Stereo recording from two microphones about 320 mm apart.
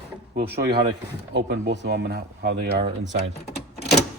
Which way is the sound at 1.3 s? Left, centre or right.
Right.